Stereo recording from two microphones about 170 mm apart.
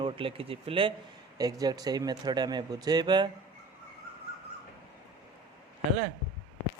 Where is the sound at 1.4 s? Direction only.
20° right (ahead or behind).